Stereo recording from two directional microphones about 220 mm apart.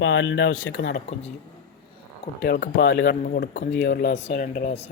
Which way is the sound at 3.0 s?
40° left (ahead or behind).